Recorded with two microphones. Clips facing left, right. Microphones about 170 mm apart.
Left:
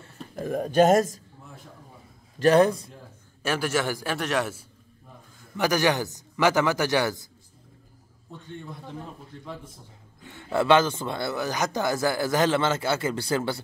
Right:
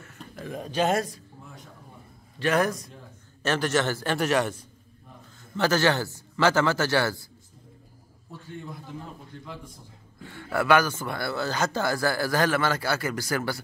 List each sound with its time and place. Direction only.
0.4 s speech: 50° left (ahead or behind)
2.3 s a man's voice: 35° left (ahead or behind)
3.4 s a man's voice: 10° left (ahead or behind)
5.6 s a man's voice: 15° left (ahead or behind)
9.4 s a man's voice: centre (ahead or behind)
10.2 s speech: 20° left (ahead or behind)